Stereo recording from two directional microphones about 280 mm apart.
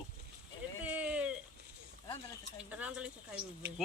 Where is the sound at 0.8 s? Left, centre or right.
Centre.